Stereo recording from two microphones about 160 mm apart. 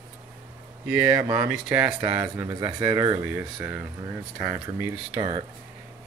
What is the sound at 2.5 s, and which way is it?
Speech, 30° right (ahead or behind).